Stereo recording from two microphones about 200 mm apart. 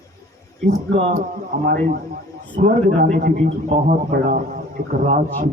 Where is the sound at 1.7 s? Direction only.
45° right (ahead or behind).